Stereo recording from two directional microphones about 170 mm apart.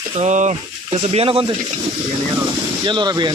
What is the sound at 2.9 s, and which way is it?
Speech, 25° right (ahead or behind).